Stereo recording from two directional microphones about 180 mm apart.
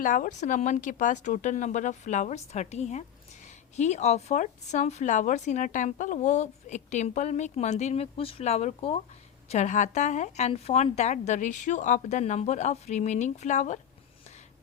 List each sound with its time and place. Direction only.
0.0 s a woman's voice: 50° left (ahead or behind)